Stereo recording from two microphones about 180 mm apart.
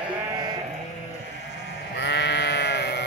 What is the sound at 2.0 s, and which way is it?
Sheep, 75° left (ahead or behind).